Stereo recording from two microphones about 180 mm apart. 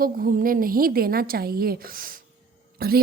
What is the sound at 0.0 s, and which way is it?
Speech, 50° right (ahead or behind).